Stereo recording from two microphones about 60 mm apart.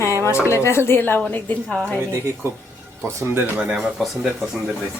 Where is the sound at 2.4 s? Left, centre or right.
Right.